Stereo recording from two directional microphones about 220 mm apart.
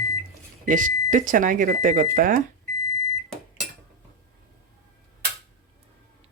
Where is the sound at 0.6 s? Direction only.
35° right (ahead or behind).